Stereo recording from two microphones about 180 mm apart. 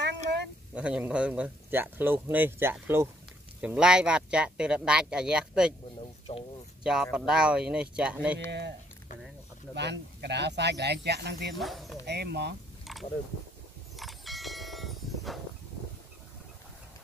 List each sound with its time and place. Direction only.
0.7 s speech: 5° right (ahead or behind)
6.3 s speech: 35° left (ahead or behind)
6.8 s speech: 5° right (ahead or behind)
8.5 s speech: 70° right (ahead or behind)
9.8 s speech: 70° right (ahead or behind)
11.5 s speech: centre (ahead or behind)
12.1 s speech: 65° right (ahead or behind)
13.9 s a sound: centre (ahead or behind)